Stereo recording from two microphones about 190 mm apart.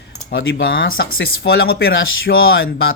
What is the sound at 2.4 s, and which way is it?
Speech, 90° left.